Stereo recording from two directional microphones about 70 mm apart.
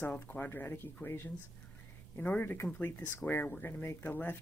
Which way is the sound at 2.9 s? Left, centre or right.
Left.